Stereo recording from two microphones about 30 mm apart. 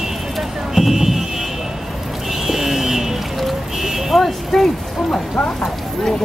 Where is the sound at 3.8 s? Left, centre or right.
Centre.